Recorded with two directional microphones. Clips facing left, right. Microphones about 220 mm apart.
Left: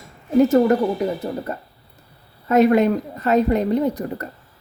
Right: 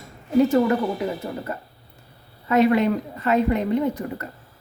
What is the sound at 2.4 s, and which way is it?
A woman's voice, 45° left (ahead or behind).